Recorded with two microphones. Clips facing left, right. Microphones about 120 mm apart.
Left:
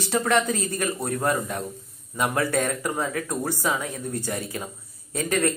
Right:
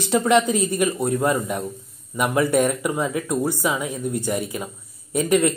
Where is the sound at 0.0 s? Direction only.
20° right (ahead or behind).